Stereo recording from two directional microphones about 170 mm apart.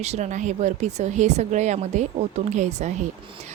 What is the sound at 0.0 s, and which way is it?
Speech, 40° right (ahead or behind).